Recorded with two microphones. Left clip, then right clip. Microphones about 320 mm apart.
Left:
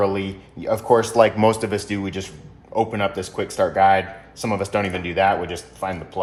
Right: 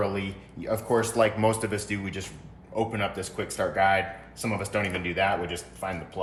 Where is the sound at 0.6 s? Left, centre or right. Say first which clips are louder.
Left 8 dB; left.